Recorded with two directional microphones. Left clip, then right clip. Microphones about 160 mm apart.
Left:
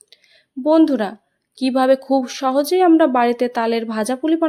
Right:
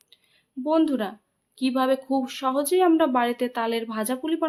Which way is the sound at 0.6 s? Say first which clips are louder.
Left 8 dB; 40° left (ahead or behind).